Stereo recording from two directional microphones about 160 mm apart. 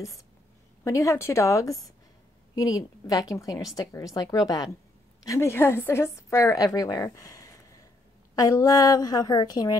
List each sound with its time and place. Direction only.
0.8 s a woman's voice: 20° left (ahead or behind)